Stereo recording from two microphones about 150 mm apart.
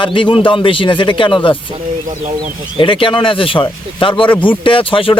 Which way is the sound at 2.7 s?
35° left (ahead or behind).